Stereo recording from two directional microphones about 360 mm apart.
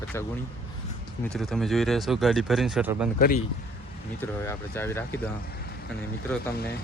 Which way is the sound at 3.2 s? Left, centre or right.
Left.